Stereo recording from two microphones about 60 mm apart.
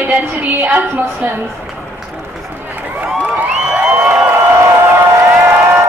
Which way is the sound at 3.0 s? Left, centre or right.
Right.